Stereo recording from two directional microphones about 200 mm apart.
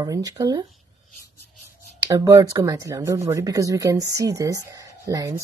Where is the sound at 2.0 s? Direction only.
20° right (ahead or behind).